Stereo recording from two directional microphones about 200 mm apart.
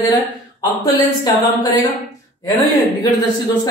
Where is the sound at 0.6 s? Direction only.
20° left (ahead or behind).